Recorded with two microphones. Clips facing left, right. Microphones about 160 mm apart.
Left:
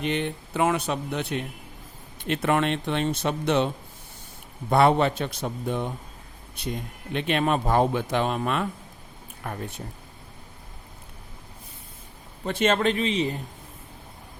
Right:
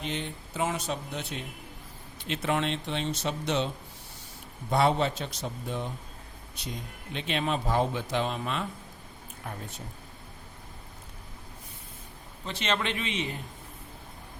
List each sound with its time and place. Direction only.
0.0 s a man's voice: 65° left (ahead or behind)
4.7 s a man's voice: 60° left (ahead or behind)
12.5 s a man's voice: 50° left (ahead or behind)